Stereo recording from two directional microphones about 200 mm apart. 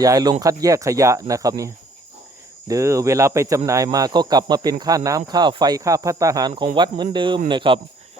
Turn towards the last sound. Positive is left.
turn(degrees=-25)  # may be behind; listen again after turning